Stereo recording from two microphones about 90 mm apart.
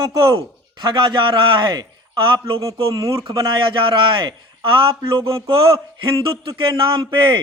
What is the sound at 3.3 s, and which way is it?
A man's voice, 65° right (ahead or behind).